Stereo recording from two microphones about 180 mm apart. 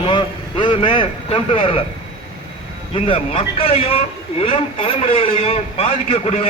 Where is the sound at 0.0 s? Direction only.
30° left (ahead or behind).